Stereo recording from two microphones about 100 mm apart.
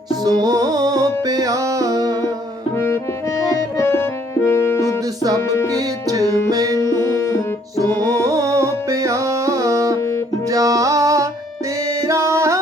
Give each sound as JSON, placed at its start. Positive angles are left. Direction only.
{"t": 0.1, "sound": "music", "side_deg": -40}
{"t": 2.7, "sound": "accordion", "side_deg": 25}
{"t": 3.8, "sound": "music", "side_deg": 30}
{"t": 4.9, "sound": "music", "side_deg": -40}
{"t": 7.0, "sound": "music", "side_deg": 25}
{"t": 8.2, "sound": "music", "side_deg": -35}
{"t": 10.0, "sound": "music", "side_deg": 25}
{"t": 10.4, "sound": "music", "side_deg": -35}